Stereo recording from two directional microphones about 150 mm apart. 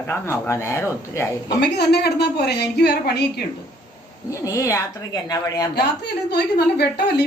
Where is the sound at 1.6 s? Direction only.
90° left.